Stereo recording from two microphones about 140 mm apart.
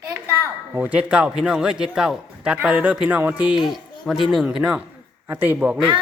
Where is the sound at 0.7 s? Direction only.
10° right (ahead or behind).